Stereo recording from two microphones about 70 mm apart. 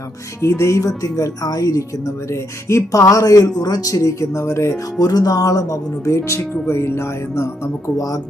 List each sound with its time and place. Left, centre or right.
0.4 s speech: left
4.9 s speech: left
6.1 s speech: left